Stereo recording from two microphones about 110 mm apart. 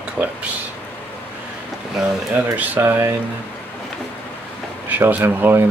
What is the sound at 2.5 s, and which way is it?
Speech, 20° right (ahead or behind).